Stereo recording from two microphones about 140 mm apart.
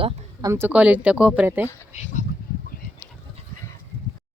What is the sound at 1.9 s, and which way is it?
Speech, 50° left (ahead or behind).